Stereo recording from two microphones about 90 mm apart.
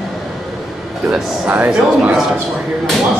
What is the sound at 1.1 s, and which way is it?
Speech, 20° right (ahead or behind).